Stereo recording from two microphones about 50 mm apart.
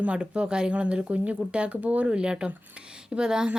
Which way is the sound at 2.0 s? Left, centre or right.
Centre.